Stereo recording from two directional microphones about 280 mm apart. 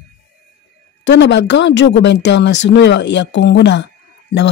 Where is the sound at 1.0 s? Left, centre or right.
Left.